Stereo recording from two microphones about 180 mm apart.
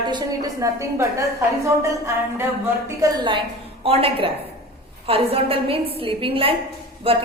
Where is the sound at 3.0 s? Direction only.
25° right (ahead or behind).